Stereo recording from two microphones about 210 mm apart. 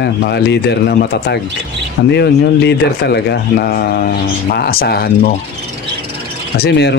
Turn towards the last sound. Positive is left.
turn(degrees=50)  # may be behind; listen again after turning